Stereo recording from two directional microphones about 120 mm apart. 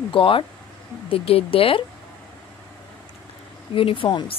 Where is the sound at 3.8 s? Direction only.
50° left (ahead or behind).